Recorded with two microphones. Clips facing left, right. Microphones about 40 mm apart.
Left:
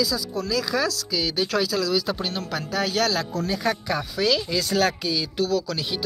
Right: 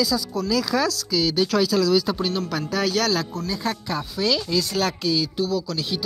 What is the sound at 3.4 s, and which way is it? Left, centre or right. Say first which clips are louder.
Speech: left 2 dB; left.